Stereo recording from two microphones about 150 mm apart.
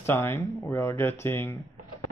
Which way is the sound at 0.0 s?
15° left (ahead or behind).